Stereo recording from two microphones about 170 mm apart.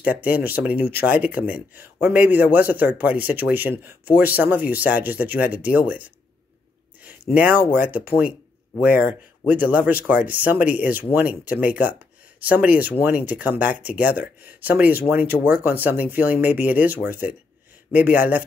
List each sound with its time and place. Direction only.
0.0 s a man's voice: 10° right (ahead or behind)
7.7 s a man's voice: 10° right (ahead or behind)